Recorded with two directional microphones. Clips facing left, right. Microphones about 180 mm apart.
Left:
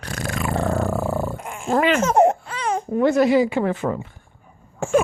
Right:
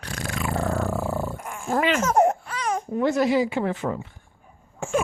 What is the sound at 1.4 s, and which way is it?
Dog, 20° left (ahead or behind).